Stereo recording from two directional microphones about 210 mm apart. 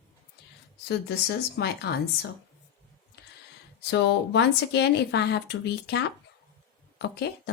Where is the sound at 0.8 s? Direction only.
50° left (ahead or behind).